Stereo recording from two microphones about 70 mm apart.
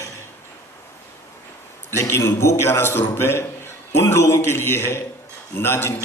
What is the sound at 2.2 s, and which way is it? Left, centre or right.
Speech, left.